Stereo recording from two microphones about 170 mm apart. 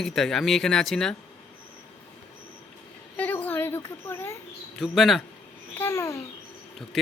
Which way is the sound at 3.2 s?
10° left (ahead or behind).